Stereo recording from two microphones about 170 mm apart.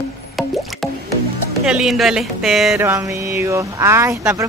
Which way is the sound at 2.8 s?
15° right (ahead or behind).